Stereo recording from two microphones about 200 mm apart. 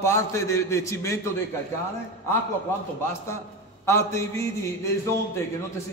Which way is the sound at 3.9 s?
15° left (ahead or behind).